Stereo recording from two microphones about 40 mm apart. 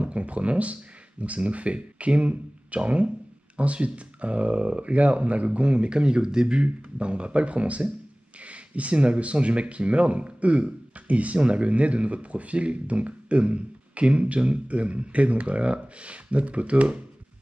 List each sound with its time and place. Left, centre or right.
0.0 s speech: right